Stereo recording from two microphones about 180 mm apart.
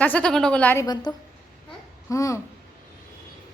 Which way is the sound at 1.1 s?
25° left (ahead or behind).